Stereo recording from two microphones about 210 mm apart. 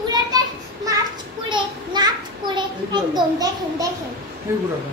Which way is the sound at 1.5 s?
20° right (ahead or behind).